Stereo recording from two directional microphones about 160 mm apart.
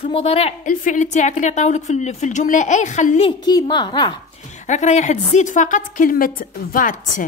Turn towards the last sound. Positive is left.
turn(degrees=60)  # may be behind; listen again after turning